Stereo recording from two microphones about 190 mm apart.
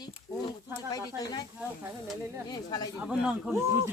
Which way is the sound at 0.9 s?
20° left (ahead or behind).